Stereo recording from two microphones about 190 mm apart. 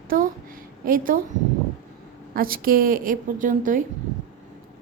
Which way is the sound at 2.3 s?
50° right (ahead or behind).